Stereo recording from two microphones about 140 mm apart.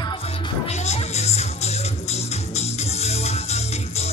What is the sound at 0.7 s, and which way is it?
Music, 50° left (ahead or behind).